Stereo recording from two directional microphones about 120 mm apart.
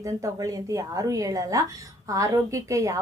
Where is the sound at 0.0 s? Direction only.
30° right (ahead or behind).